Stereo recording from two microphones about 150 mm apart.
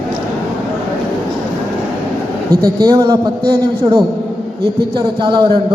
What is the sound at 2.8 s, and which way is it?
A man's voice, 25° right (ahead or behind).